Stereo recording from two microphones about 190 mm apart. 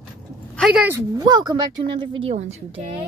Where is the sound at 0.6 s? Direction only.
5° right (ahead or behind).